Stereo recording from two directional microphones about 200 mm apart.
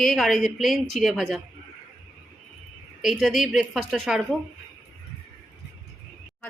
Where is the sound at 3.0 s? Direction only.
Centre (ahead or behind).